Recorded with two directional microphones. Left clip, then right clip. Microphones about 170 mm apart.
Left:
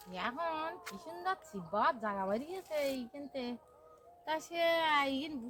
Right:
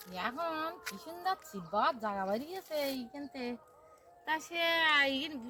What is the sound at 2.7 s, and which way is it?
Speech, 80° left.